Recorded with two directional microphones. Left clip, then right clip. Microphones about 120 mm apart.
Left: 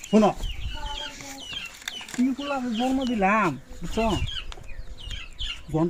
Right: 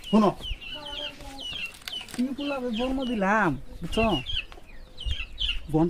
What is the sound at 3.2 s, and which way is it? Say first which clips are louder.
Speech: left 1 dB; 35° right (ahead or behind).